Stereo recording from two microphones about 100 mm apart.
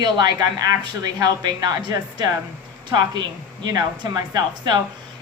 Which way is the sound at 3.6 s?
40° right (ahead or behind).